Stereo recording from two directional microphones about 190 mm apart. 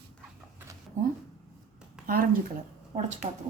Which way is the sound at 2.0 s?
50° right (ahead or behind).